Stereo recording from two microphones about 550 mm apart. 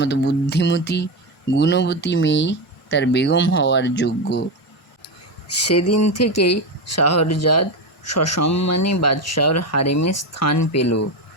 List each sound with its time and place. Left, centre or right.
0.0 s speech: centre
5.6 s speech: left